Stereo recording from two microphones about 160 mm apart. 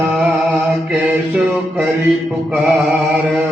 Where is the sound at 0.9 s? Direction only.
10° right (ahead or behind).